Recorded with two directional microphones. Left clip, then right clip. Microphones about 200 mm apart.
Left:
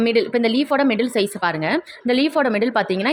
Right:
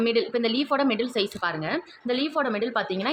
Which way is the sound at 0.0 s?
30° left (ahead or behind).